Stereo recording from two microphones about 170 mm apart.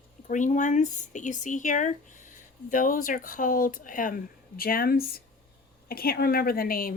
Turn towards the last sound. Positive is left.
turn(degrees=55)  # may be behind; listen again after turning